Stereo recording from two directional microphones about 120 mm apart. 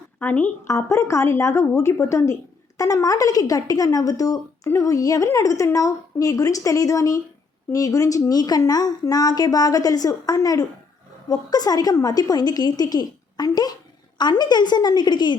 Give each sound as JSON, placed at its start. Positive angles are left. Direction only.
{"t": 0.2, "sound": "a woman's voice", "side_deg": 15}